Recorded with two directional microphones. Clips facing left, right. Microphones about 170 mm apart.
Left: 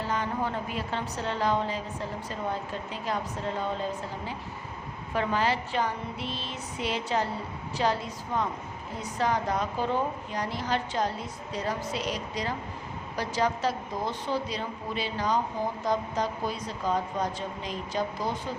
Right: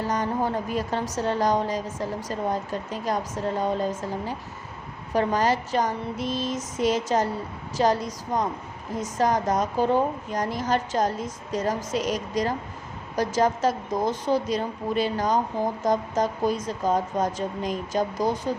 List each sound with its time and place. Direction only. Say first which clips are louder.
0.1 s a woman's voice: right 4 dB; 40° right (ahead or behind)
5.1 s a woman's voice: right 5 dB; 40° right (ahead or behind)